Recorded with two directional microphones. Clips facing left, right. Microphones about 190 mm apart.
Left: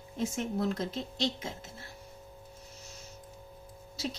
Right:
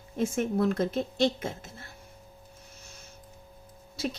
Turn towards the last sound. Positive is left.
turn(degrees=-55)  # may be behind; listen again after turning